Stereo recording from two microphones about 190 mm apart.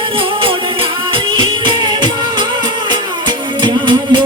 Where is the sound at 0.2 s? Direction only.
25° right (ahead or behind).